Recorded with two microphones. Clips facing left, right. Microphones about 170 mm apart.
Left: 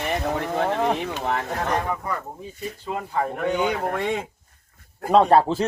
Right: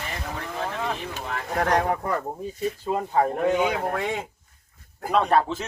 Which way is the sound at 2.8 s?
40° right (ahead or behind).